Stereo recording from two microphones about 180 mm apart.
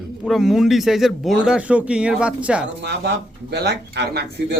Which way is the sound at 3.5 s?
70° right (ahead or behind).